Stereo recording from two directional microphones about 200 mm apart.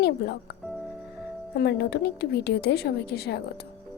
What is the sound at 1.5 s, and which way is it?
Speech, 55° left (ahead or behind).